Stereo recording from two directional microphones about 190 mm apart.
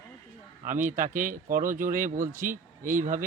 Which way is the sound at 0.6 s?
45° right (ahead or behind).